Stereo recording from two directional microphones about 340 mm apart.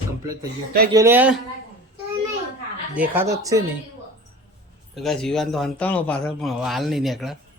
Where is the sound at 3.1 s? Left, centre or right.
Centre.